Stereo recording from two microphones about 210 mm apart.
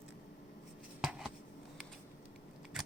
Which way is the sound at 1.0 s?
Centre (ahead or behind).